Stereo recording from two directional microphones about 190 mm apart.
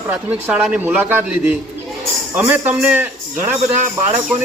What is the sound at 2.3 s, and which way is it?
A man's voice, 5° right (ahead or behind).